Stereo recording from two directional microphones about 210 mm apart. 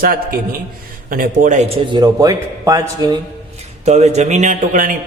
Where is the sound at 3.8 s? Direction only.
30° right (ahead or behind).